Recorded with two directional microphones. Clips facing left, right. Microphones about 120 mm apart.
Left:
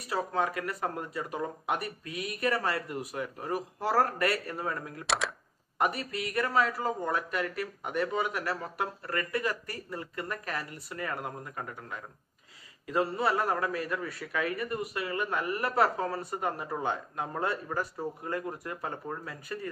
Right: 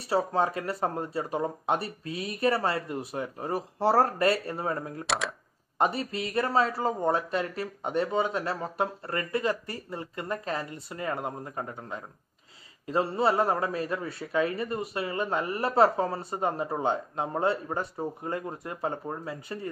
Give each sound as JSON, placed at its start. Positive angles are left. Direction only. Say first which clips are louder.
{"t": 0.1, "sound": "a man's voice", "louder": "right 4 dB", "side_deg": -30}
{"t": 5.0, "sound": "speech", "louder": "left 1 dB", "side_deg": 0}
{"t": 5.8, "sound": "a man's voice", "louder": "right 3 dB", "side_deg": -25}